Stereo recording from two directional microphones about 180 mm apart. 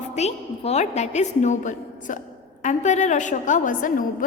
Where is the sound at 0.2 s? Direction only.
35° left (ahead or behind).